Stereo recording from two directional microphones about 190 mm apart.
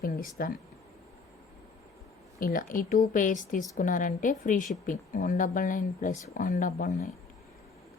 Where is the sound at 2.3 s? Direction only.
50° left (ahead or behind).